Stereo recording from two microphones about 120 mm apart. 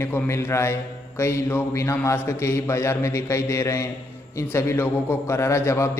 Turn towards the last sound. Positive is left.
turn(degrees=25)  # may be behind; listen again after turning